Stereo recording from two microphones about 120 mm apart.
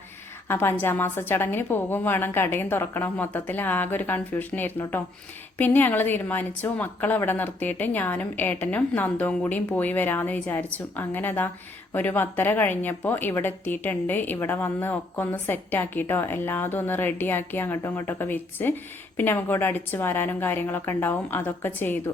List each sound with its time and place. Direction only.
0.4 s a woman's voice: 20° left (ahead or behind)